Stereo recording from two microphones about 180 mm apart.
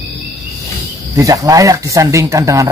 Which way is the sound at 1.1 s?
20° right (ahead or behind).